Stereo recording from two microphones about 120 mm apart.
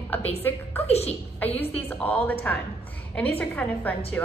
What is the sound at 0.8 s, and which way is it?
Speech, 60° left (ahead or behind).